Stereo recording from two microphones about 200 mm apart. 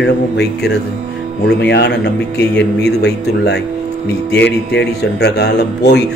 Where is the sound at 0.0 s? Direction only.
55° left (ahead or behind).